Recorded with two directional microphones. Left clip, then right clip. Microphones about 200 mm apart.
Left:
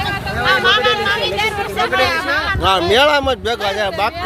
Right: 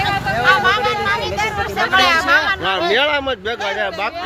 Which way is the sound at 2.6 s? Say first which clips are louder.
Left 4 dB; 25° left (ahead or behind).